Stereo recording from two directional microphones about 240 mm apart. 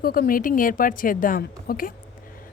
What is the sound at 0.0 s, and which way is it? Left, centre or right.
A woman's voice, left.